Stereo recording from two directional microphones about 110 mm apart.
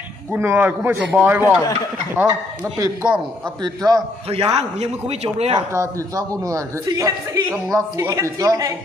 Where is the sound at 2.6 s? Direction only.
25° right (ahead or behind).